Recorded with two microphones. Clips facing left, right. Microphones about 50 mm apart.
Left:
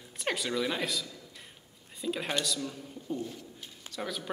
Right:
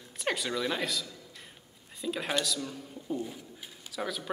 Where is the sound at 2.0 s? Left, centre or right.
Centre.